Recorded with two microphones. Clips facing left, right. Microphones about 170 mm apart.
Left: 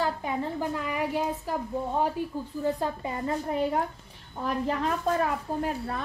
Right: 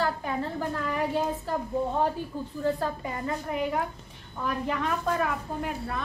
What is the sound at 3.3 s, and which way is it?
A woman's voice, 35° left (ahead or behind).